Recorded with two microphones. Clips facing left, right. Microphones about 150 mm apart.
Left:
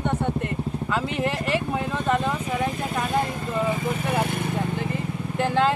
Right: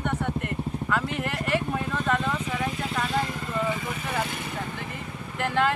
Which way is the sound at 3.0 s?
50° left (ahead or behind).